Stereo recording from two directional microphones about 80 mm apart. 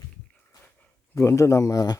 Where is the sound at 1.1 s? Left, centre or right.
Left.